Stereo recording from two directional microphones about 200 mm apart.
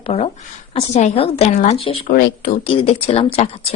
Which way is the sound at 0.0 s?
30° left (ahead or behind).